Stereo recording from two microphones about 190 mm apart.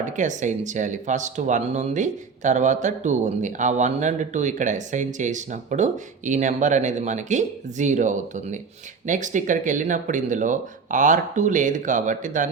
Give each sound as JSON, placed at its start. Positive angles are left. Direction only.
{"t": 0.0, "sound": "speech", "side_deg": -40}